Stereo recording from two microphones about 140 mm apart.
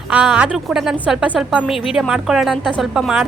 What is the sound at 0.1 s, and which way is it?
A woman's voice, 10° right (ahead or behind).